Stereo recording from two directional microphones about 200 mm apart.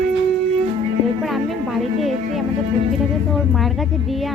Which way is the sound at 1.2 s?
Centre (ahead or behind).